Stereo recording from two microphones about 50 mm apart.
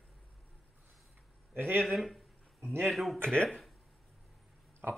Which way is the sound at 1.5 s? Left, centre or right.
Right.